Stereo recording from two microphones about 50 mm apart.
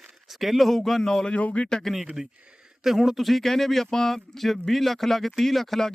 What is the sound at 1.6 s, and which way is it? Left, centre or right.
Speech, centre.